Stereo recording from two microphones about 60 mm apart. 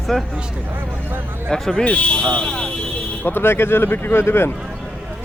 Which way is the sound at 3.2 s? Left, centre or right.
Left.